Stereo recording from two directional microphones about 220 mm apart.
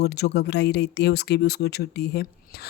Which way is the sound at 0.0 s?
50° left (ahead or behind).